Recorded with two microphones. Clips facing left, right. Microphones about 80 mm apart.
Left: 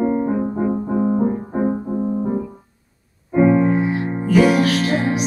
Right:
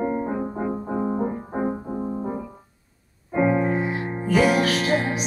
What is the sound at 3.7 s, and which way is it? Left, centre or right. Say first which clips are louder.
Music: left 5 dB; centre.